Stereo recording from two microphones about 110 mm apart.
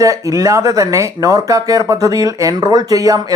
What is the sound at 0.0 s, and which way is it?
Speech, 30° right (ahead or behind).